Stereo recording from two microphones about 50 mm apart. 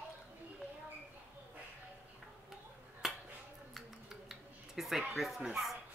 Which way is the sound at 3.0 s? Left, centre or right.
Centre.